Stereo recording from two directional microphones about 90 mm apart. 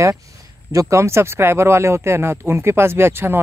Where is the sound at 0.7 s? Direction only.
35° right (ahead or behind).